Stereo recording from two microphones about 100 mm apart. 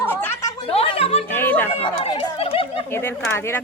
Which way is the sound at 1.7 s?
75° left (ahead or behind).